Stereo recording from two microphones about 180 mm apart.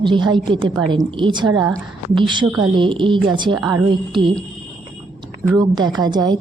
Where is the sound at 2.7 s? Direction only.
25° right (ahead or behind).